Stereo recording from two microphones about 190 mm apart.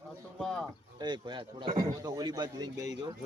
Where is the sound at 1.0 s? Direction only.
25° right (ahead or behind).